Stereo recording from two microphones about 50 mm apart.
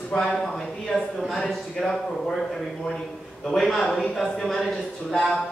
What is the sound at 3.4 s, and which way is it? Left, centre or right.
A man's voice, centre.